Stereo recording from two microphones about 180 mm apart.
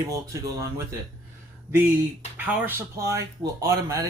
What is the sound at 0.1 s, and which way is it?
Speech, 15° right (ahead or behind).